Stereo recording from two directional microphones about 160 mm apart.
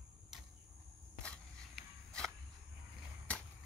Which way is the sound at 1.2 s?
5° left (ahead or behind).